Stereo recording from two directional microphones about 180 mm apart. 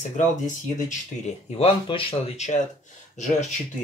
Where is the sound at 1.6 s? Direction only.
30° left (ahead or behind).